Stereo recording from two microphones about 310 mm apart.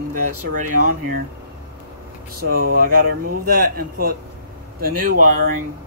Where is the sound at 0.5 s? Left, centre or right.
Right.